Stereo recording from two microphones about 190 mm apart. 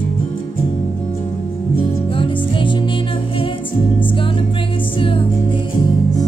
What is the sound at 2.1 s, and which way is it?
Music, 25° left (ahead or behind).